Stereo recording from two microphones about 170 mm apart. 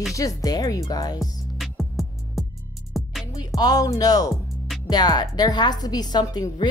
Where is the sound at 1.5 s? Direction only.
Centre (ahead or behind).